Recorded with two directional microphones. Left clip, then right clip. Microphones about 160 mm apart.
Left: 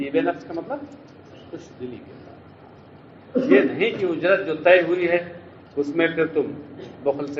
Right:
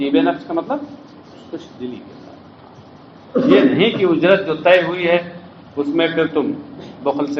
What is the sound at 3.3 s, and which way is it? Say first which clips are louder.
A man's voice: right 5 dB; 35° right (ahead or behind).